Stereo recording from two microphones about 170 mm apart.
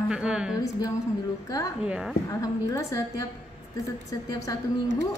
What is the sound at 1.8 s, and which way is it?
Speech, 5° right (ahead or behind).